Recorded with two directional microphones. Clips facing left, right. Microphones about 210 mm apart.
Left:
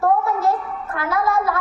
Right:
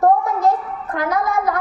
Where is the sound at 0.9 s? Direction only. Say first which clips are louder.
Right 1 dB; 15° right (ahead or behind).